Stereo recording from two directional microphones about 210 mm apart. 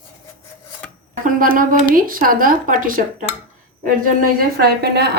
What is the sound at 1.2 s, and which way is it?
Speech, 40° right (ahead or behind).